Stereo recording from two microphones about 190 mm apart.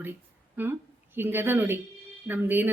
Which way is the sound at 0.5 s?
10° right (ahead or behind).